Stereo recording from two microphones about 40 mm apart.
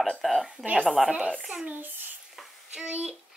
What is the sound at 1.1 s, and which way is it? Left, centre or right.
Speech, right.